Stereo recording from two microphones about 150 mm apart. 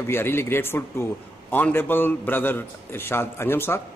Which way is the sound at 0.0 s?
15° left (ahead or behind).